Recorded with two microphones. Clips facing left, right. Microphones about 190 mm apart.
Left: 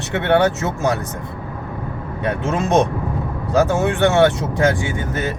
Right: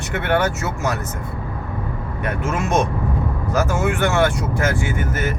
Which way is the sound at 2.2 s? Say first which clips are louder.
Left 3 dB; 20° left (ahead or behind).